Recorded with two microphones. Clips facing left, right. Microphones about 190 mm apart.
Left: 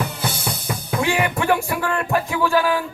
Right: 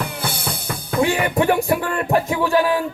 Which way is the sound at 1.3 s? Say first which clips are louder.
Right 3 dB; 20° right (ahead or behind).